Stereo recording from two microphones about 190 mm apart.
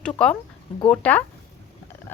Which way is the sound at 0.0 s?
5° left (ahead or behind).